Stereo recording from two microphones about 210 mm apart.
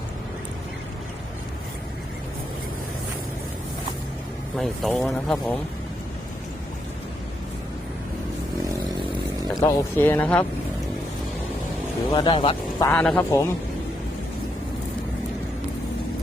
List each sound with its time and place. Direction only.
4.5 s speech: centre (ahead or behind)
9.6 s speech: 15° left (ahead or behind)
12.1 s speech: 25° left (ahead or behind)
12.9 s speech: 5° left (ahead or behind)